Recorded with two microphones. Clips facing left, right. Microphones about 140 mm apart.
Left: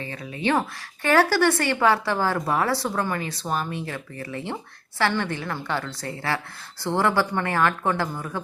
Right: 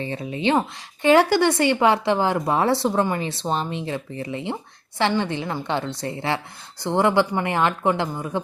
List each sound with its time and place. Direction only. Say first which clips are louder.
0.0 s speech: right 4 dB; 25° right (ahead or behind)